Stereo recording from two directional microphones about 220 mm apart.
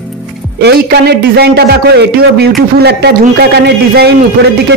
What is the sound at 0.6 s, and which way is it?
A man's voice, 45° right (ahead or behind).